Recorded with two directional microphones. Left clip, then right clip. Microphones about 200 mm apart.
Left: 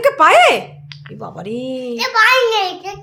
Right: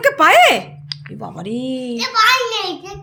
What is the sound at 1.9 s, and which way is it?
A child's voice, 30° left (ahead or behind).